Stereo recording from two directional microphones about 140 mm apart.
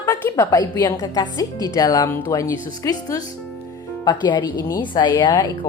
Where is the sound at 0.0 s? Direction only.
25° left (ahead or behind).